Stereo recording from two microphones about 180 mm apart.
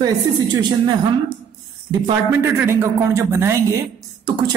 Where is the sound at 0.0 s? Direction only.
25° right (ahead or behind).